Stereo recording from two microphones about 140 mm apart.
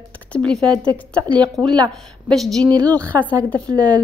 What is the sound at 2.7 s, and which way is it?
Speech, 25° right (ahead or behind).